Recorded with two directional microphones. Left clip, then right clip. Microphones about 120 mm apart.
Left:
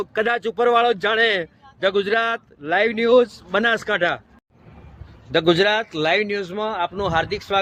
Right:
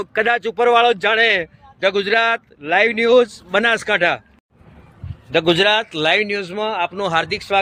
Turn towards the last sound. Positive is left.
turn(degrees=-25)  # may be behind; listen again after turning